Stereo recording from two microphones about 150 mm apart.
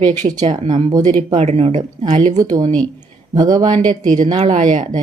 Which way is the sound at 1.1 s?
45° right (ahead or behind).